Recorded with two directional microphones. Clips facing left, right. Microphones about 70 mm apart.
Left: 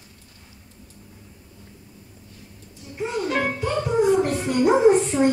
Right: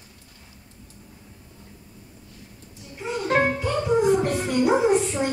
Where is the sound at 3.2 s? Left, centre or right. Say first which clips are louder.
Right 5 dB; right.